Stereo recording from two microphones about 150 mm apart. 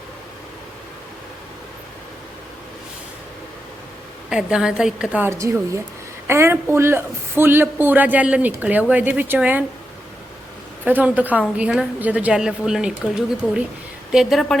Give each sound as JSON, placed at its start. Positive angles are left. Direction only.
{"t": 4.3, "sound": "a woman's voice", "side_deg": -5}
{"t": 5.3, "sound": "a man's voice", "side_deg": -20}
{"t": 10.8, "sound": "a man's voice", "side_deg": -10}